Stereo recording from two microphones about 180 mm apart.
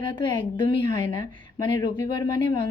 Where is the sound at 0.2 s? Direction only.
25° left (ahead or behind).